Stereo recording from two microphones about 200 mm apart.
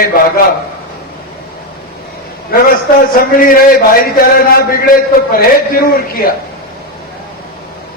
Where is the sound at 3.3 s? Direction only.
45° left (ahead or behind).